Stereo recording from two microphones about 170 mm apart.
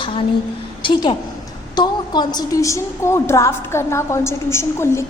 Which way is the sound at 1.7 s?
25° left (ahead or behind).